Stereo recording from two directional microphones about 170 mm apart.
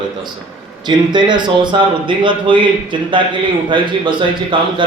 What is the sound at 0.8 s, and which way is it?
A man's voice, 25° right (ahead or behind).